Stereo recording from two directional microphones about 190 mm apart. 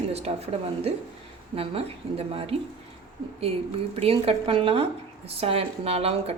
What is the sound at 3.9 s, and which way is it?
Speech, 30° right (ahead or behind).